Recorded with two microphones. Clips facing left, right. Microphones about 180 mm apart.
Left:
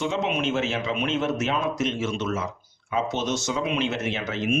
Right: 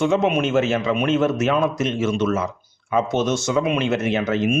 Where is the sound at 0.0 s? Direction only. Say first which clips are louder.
Right 7 dB; 50° right (ahead or behind).